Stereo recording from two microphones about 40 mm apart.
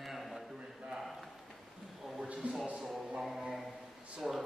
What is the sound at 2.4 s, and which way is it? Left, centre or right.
Speech, right.